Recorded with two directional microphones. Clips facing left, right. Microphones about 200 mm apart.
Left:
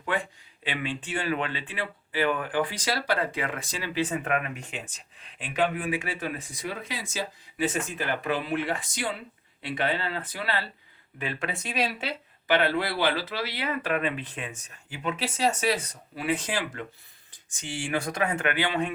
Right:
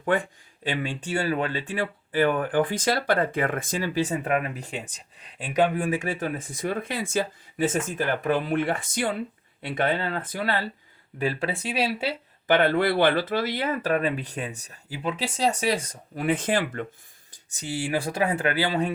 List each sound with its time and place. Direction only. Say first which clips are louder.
0.1 s speech: right 5 dB; 45° right (ahead or behind)
4.2 s speech: right 3 dB; 35° right (ahead or behind)
11.2 s speech: right 6 dB; 35° right (ahead or behind)
12.5 s speech: right 4 dB; 50° right (ahead or behind); by 15.2 s 35° right (ahead or behind)
16.1 s speech: right 5 dB; 55° right (ahead or behind)
17.3 s speech: right 5 dB; 35° right (ahead or behind)